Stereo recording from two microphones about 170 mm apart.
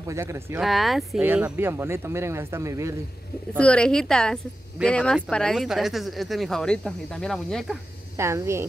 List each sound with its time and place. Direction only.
0.1 s speech: 15° right (ahead or behind)
0.6 s speech: centre (ahead or behind)
1.2 s speech: 10° right (ahead or behind)
3.5 s speech: 5° left (ahead or behind)
8.2 s speech: 15° right (ahead or behind)